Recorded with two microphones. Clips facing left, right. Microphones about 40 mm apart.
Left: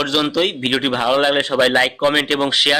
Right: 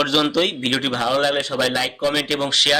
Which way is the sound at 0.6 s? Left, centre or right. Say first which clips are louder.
Left 3 dB; centre.